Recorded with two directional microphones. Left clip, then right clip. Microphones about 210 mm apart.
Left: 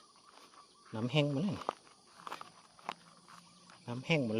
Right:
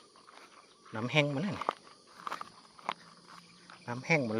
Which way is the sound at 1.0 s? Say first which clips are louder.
Right 4 dB; 35° left (ahead or behind).